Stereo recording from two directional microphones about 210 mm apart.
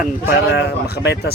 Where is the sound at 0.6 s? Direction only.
55° left (ahead or behind).